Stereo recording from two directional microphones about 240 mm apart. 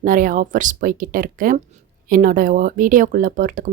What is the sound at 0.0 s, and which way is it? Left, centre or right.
Speech, right.